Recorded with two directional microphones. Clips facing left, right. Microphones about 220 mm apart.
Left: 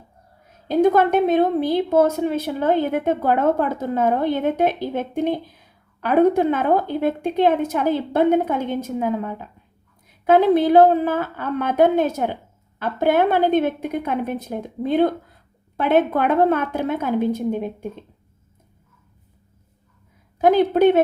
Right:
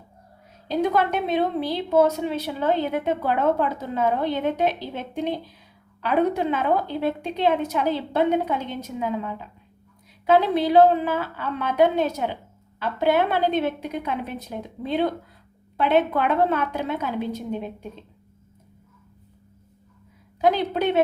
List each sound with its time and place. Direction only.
0.7 s a woman's voice: 50° left (ahead or behind)
20.4 s a woman's voice: 50° left (ahead or behind)